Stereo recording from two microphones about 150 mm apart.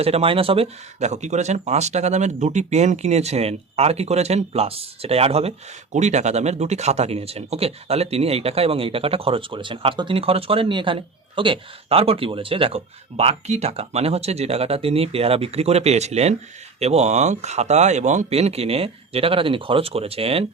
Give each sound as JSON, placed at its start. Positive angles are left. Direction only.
{"t": 0.0, "sound": "speech", "side_deg": -40}